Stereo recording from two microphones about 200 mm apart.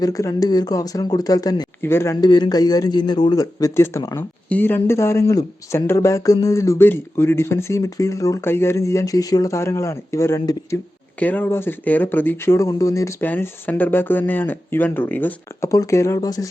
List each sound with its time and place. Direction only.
0.0 s speech: 15° left (ahead or behind)